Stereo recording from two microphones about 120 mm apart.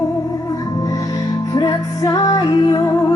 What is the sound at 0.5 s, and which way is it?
Music, 30° left (ahead or behind).